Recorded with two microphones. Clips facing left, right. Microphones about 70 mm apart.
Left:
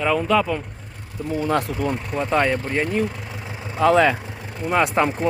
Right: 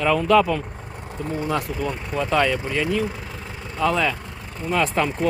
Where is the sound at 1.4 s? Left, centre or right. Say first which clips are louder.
Left 3 dB; left.